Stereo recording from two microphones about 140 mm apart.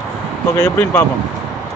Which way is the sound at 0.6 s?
15° left (ahead or behind).